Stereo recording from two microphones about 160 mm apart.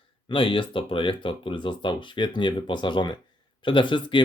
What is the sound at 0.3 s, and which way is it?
Speech, 30° left (ahead or behind).